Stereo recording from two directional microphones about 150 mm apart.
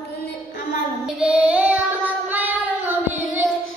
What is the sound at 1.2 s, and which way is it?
Child singing, 10° right (ahead or behind).